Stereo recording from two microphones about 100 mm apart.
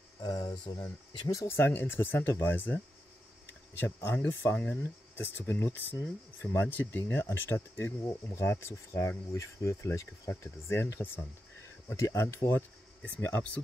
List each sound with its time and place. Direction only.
0.2 s speech: 40° left (ahead or behind); by 13.1 s 25° left (ahead or behind)